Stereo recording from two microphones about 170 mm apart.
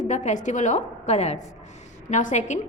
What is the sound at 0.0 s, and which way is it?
A woman's voice, 45° left (ahead or behind).